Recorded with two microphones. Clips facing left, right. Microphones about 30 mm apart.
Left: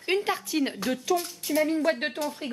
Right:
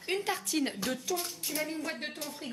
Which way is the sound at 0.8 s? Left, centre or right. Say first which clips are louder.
Left 7 dB; left.